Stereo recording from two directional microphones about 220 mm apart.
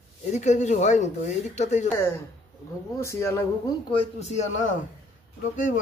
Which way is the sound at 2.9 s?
10° left (ahead or behind).